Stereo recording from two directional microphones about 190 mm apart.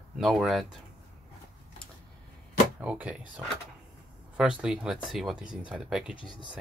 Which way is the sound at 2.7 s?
10° right (ahead or behind).